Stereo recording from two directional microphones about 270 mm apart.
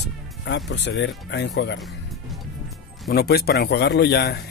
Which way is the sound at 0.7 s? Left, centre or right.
Left.